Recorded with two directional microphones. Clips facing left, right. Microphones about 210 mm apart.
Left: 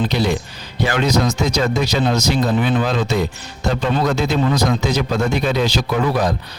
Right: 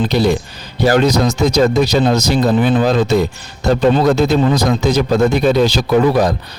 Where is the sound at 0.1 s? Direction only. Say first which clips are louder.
Right 5 dB; 40° right (ahead or behind).